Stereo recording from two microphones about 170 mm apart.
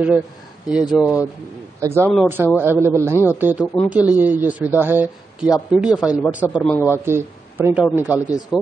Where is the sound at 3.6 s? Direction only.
5° left (ahead or behind).